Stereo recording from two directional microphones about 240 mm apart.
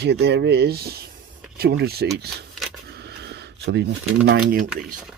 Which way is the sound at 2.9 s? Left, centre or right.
Right.